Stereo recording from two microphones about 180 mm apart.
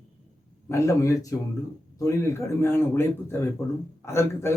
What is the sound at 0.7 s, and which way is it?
A man's voice, 15° left (ahead or behind).